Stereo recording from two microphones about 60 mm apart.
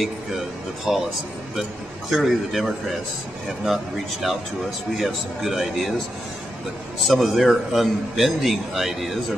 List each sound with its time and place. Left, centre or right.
0.9 s a man's voice: centre
7.1 s a man's voice: centre